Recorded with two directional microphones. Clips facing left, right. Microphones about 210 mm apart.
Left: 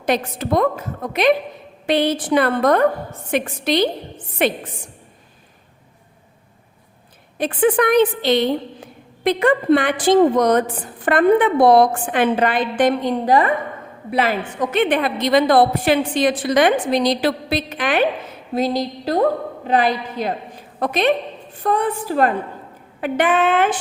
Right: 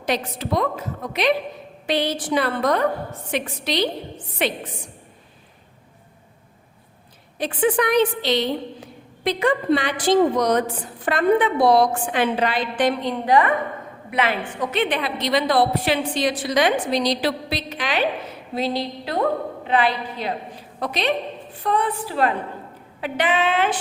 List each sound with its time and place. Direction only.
0.0 s a woman's voice: 50° left (ahead or behind)
7.3 s a woman's voice: 55° left (ahead or behind)